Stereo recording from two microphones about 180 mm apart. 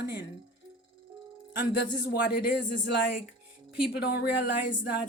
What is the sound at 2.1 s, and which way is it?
A woman's voice, 65° left (ahead or behind).